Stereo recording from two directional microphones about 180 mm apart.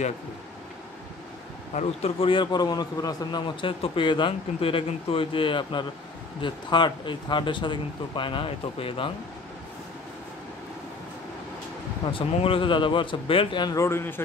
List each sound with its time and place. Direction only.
1.8 s a man's voice: 30° left (ahead or behind)
12.1 s a man's voice: 30° left (ahead or behind); by 14.2 s 15° left (ahead or behind)